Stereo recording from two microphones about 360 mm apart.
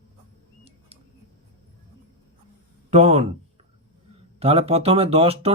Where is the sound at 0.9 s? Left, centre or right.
Centre.